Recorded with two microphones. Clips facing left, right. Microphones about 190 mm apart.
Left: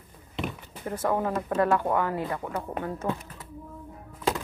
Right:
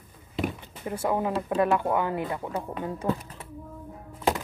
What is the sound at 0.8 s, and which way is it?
Speech, 10° right (ahead or behind).